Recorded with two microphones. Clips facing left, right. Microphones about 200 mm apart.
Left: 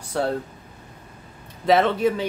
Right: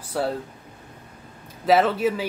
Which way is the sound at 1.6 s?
5° right (ahead or behind).